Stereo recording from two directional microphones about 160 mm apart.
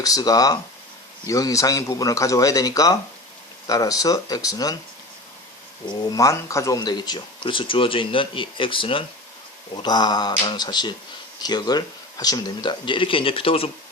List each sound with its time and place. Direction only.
0.0 s speech: 25° left (ahead or behind)
5.9 s speech: 20° left (ahead or behind)